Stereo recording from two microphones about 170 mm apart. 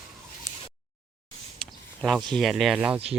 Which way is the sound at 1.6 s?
Centre (ahead or behind).